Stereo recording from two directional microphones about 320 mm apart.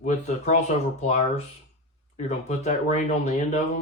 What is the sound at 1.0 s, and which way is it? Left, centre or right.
Speech, left.